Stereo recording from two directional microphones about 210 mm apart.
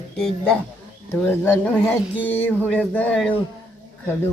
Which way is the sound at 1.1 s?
10° left (ahead or behind).